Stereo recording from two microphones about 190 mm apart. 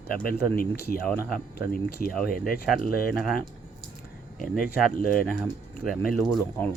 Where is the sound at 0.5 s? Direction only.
55° left (ahead or behind).